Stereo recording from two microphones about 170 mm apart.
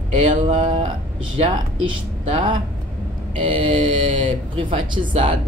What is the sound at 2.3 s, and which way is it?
Speech, 30° right (ahead or behind).